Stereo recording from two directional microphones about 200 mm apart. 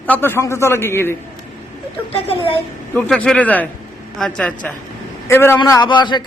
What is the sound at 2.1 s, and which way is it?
Speech, 30° left (ahead or behind).